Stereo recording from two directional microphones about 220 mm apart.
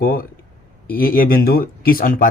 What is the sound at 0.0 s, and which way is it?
A man's voice, 40° left (ahead or behind).